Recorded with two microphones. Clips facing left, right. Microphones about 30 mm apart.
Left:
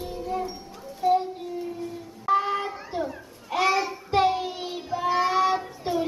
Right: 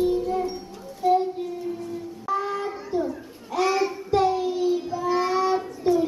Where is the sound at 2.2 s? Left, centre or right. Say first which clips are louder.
Left 3 dB; left.